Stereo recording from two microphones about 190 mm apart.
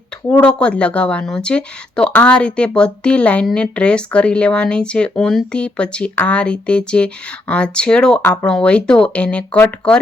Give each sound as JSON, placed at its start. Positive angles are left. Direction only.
{"t": 0.3, "sound": "speech", "side_deg": 5}